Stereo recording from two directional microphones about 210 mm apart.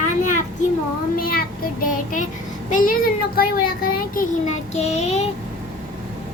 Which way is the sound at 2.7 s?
40° left (ahead or behind).